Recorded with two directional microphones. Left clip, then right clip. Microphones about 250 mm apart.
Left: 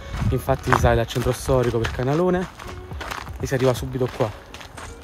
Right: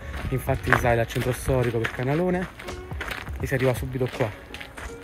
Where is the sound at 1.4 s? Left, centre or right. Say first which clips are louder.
Left 4 dB; left.